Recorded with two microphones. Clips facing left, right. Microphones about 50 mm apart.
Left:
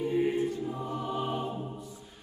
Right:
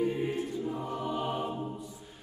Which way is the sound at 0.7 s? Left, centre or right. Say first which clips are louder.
Even; centre.